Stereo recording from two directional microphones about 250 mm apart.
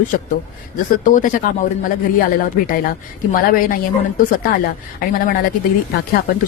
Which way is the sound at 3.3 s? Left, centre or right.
Left.